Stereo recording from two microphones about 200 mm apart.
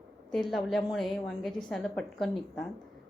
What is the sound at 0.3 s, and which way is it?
A woman's voice, centre (ahead or behind).